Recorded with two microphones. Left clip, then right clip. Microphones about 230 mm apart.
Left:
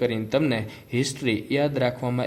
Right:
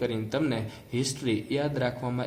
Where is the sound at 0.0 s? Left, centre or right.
Left.